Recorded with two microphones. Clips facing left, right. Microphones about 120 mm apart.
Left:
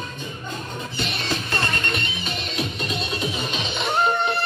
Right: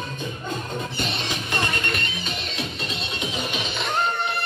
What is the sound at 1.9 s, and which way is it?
Music, centre (ahead or behind).